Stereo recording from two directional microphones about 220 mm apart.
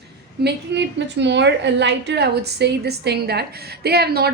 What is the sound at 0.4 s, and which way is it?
A woman's voice, 50° right (ahead or behind).